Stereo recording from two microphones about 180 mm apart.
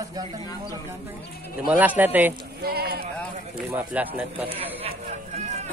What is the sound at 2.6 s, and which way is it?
Speech, 60° right (ahead or behind).